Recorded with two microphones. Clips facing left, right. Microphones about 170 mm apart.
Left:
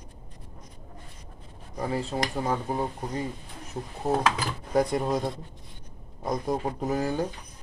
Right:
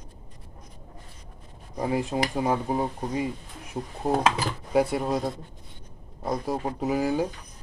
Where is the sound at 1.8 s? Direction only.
15° right (ahead or behind).